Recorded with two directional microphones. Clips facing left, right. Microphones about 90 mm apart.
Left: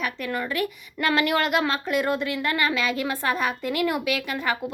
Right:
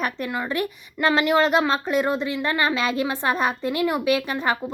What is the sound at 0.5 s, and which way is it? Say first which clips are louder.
Speech: right 1 dB; 30° right (ahead or behind).